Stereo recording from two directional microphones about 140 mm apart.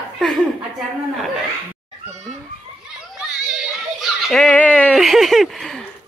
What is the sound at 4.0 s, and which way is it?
Giggle, centre (ahead or behind).